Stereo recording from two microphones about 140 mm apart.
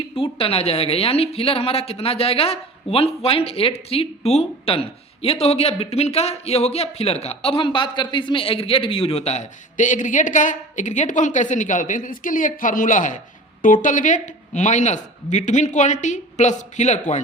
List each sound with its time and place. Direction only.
0.2 s a woman's voice: 40° left (ahead or behind); by 17.2 s 55° left (ahead or behind)